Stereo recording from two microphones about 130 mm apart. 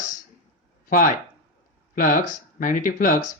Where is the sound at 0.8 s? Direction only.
90° left.